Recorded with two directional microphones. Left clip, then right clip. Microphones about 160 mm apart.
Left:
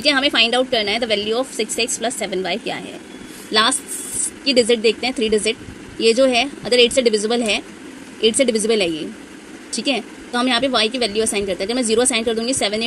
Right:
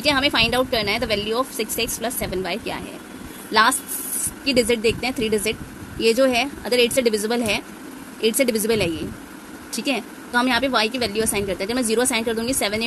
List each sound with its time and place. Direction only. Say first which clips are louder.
0.0 s speech: left 3 dB; 15° left (ahead or behind)